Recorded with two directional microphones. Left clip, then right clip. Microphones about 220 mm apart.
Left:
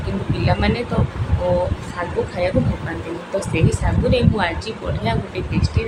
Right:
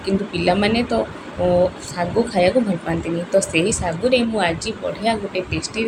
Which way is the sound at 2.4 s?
15° right (ahead or behind).